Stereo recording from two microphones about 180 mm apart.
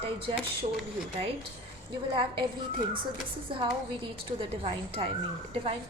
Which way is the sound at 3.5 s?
30° right (ahead or behind).